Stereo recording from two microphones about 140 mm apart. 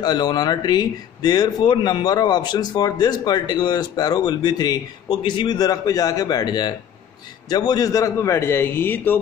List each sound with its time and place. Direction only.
0.0 s a man's voice: 30° left (ahead or behind); by 9.2 s 15° left (ahead or behind)